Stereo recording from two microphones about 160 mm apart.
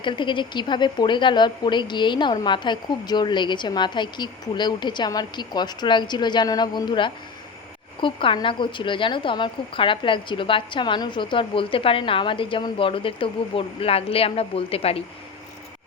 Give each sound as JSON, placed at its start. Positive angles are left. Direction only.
{"t": 0.0, "sound": "speech", "side_deg": 30}